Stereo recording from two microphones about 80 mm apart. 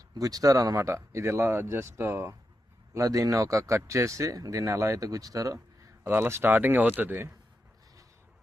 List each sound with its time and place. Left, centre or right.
0.2 s speech: right
0.9 s speech: right
6.1 s speech: right